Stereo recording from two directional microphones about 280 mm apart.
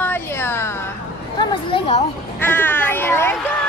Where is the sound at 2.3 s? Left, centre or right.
Centre.